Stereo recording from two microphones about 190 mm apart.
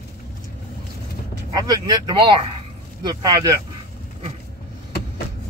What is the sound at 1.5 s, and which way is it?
Speech, 20° right (ahead or behind).